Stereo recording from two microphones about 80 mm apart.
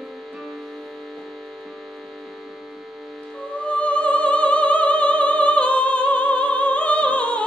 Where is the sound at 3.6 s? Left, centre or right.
Centre.